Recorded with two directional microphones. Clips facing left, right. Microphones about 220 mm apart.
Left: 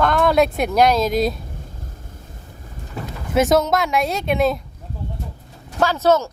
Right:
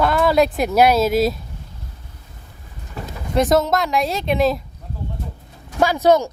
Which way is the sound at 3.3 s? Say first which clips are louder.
Even; centre (ahead or behind).